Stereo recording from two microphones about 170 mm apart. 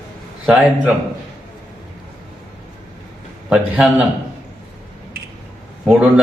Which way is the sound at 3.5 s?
5° right (ahead or behind).